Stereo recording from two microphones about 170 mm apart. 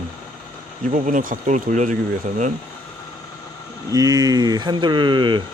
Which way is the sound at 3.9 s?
25° right (ahead or behind).